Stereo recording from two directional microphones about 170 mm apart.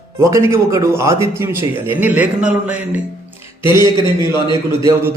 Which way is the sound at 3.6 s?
25° left (ahead or behind).